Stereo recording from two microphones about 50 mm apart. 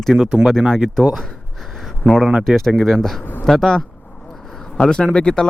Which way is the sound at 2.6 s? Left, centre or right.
Centre.